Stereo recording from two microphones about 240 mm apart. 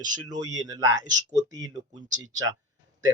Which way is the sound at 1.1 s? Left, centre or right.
Right.